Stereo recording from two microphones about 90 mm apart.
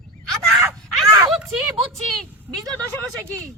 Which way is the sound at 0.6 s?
40° right (ahead or behind).